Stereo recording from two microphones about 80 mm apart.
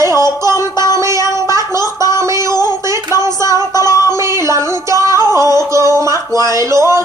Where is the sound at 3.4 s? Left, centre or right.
Right.